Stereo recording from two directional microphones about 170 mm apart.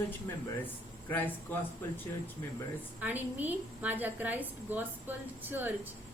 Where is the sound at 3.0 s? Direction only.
10° right (ahead or behind).